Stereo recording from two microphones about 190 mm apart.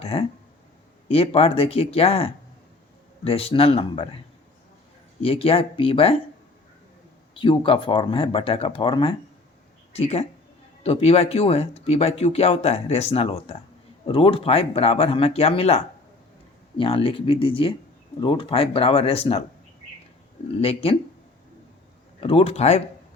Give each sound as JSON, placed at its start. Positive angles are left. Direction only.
{"t": 0.0, "sound": "speech", "side_deg": 30}
{"t": 5.2, "sound": "speech", "side_deg": 30}
{"t": 7.3, "sound": "speech", "side_deg": 25}
{"t": 20.6, "sound": "speech", "side_deg": 30}
{"t": 22.2, "sound": "speech", "side_deg": 30}